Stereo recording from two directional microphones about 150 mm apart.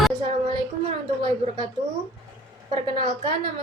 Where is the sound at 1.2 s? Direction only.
35° right (ahead or behind).